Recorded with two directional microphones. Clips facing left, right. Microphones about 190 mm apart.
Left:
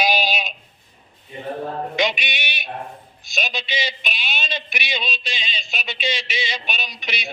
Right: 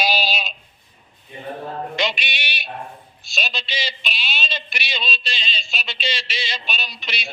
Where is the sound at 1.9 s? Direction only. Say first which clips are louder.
Left 3 dB; 15° left (ahead or behind).